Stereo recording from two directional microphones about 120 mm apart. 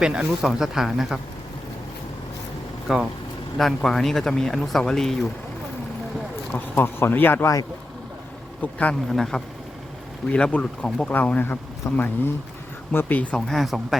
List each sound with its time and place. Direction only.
0.0 s speech: 10° right (ahead or behind)
2.8 s speech: 5° right (ahead or behind)
6.5 s speech: 15° left (ahead or behind)
8.6 s speech: 10° left (ahead or behind)
13.5 s speech: centre (ahead or behind)